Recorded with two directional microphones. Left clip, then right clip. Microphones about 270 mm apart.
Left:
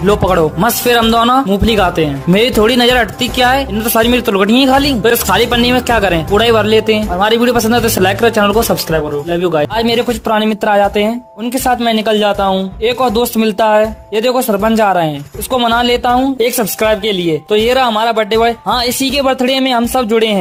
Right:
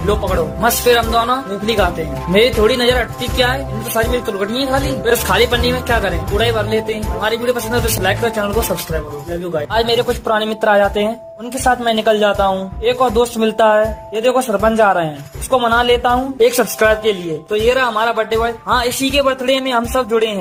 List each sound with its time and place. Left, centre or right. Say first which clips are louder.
0.1 s a woman's voice: left 6 dB; left